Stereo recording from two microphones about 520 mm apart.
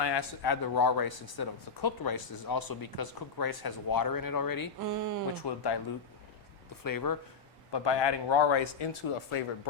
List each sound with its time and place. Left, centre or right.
0.0 s speech: left
4.8 s speech: right
5.3 s speech: left
6.8 s speech: left
7.7 s speech: left